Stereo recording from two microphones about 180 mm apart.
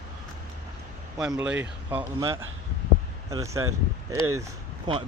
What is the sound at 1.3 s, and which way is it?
Speech, 10° right (ahead or behind).